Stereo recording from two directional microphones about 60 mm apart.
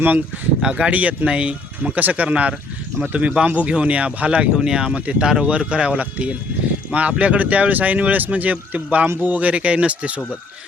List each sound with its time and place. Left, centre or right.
0.6 s speech: centre